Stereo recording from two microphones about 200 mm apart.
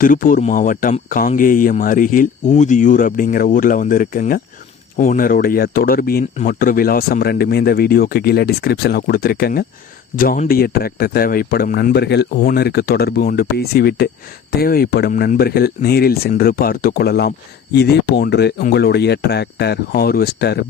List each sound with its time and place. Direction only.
0.0 s speech: 45° left (ahead or behind)
12.4 s speech: 45° left (ahead or behind)